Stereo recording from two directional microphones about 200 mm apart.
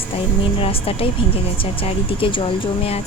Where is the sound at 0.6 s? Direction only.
30° left (ahead or behind).